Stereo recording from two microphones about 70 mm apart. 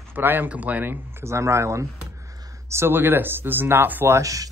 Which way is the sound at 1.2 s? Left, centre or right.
Right.